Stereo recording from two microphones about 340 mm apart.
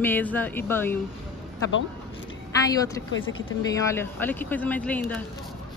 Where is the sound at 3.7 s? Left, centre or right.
Centre.